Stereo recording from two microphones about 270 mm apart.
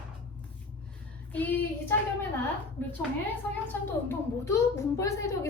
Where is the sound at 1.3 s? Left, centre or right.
Centre.